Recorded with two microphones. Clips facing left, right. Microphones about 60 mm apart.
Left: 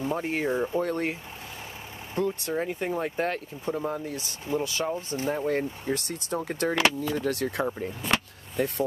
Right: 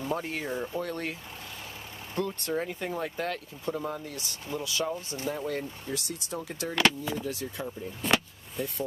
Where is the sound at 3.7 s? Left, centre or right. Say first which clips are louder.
Left 5 dB; centre.